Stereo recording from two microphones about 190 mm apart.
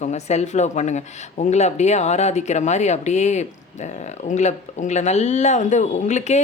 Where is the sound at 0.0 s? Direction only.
35° left (ahead or behind).